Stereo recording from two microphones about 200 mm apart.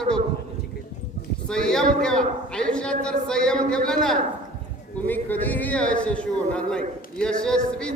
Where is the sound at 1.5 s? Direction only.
5° left (ahead or behind).